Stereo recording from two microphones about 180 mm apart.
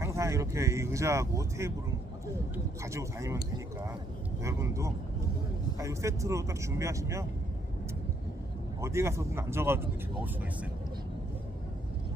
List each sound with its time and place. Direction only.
0.0 s speech: 15° right (ahead or behind)
2.8 s speech: 15° right (ahead or behind)
4.4 s speech: 15° right (ahead or behind)
8.8 s speech: 15° right (ahead or behind)